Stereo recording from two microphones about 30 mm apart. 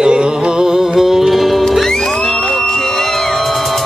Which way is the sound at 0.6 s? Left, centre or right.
Centre.